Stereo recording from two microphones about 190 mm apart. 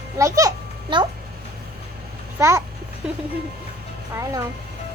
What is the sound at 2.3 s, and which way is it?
Speech, 15° right (ahead or behind).